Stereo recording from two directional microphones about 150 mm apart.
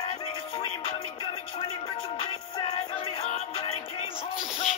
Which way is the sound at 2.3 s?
35° left (ahead or behind).